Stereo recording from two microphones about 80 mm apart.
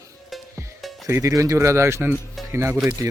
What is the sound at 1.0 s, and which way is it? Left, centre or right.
Speech, right.